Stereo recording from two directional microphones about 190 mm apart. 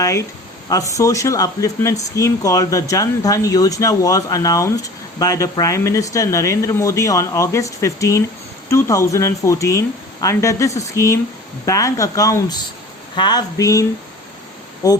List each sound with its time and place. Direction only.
0.0 s speech: 15° left (ahead or behind)
14.8 s speech: 20° left (ahead or behind)